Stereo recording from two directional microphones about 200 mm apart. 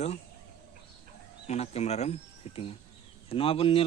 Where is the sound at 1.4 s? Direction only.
35° left (ahead or behind).